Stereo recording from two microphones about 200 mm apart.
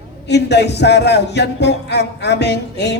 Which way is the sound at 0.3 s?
55° left (ahead or behind).